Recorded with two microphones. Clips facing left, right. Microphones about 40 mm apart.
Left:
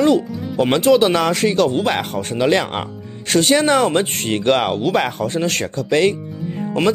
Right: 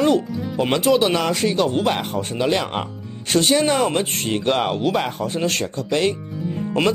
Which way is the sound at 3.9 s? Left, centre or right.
Left.